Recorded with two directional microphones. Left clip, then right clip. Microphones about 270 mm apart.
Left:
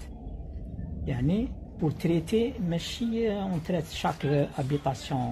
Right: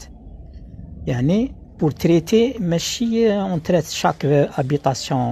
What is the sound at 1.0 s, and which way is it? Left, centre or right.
Speech, right.